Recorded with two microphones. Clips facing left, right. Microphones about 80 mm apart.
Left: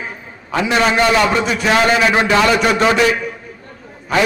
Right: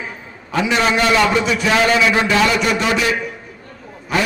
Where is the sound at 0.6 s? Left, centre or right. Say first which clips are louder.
Left 2 dB; left.